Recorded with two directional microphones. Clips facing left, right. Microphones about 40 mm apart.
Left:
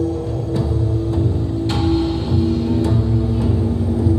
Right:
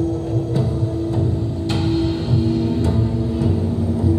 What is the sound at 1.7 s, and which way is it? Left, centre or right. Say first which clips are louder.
Music: left 1 dB; left.